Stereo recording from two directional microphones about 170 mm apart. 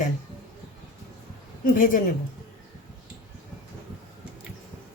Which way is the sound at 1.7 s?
55° left (ahead or behind).